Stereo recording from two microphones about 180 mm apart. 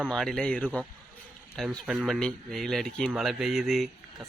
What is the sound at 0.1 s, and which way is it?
Speech, 5° left (ahead or behind).